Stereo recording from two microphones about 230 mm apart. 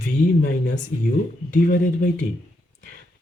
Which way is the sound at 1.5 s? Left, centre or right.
Left.